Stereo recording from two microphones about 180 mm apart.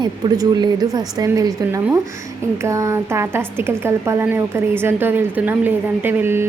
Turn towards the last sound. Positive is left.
turn(degrees=-10)  # may be behind; listen again after turning